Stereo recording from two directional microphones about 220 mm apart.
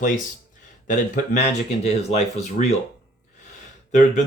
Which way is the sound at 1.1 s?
30° left (ahead or behind).